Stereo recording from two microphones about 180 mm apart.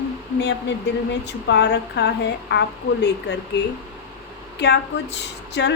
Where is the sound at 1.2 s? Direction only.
70° left (ahead or behind).